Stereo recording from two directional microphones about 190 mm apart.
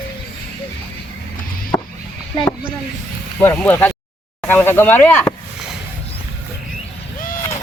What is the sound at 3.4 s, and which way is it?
Speech, 10° left (ahead or behind).